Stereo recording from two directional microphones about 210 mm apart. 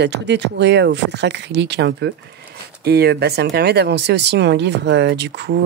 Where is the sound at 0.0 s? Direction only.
55° right (ahead or behind).